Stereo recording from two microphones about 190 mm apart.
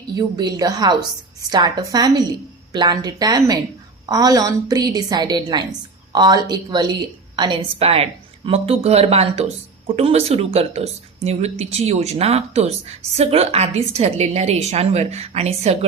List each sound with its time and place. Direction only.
0.2 s a woman's voice: 20° right (ahead or behind)